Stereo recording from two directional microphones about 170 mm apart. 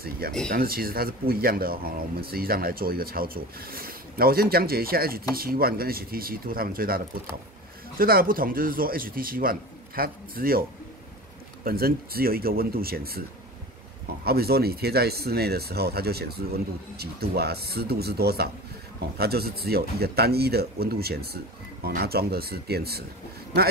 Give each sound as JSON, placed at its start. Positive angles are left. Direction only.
{"t": 0.5, "sound": "speech", "side_deg": -60}
{"t": 8.0, "sound": "speech", "side_deg": -60}
{"t": 11.6, "sound": "speech", "side_deg": -60}
{"t": 14.2, "sound": "speech", "side_deg": -65}